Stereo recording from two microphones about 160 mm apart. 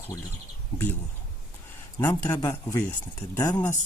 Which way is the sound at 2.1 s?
20° left (ahead or behind).